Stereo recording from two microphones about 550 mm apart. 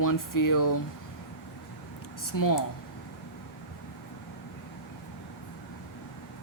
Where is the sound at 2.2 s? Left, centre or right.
Left.